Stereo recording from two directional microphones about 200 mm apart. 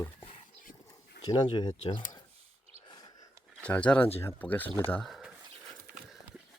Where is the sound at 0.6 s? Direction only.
45° left (ahead or behind).